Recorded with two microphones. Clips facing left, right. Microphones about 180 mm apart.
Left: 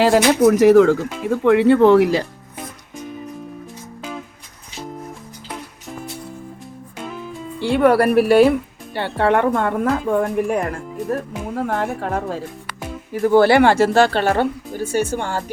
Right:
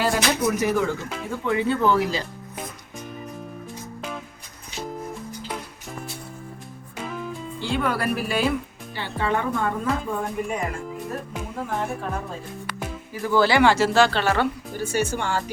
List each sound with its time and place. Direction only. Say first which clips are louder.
0.0 s speech: left 9 dB; 70° left (ahead or behind)
7.0 s music: left 1 dB; centre (ahead or behind)
7.6 s speech: left 11 dB; 65° left (ahead or behind)
13.2 s speech: left 6 dB; 55° left (ahead or behind)